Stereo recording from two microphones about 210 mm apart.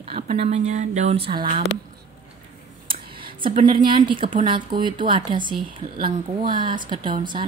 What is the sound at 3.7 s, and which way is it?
Speech, 20° right (ahead or behind).